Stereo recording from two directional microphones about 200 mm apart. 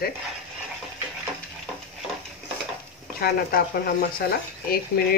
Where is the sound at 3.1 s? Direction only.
50° left (ahead or behind).